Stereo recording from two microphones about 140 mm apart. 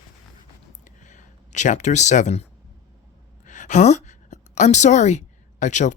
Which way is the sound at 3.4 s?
65° left (ahead or behind).